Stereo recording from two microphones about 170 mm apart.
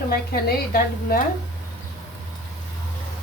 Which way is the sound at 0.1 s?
60° left (ahead or behind).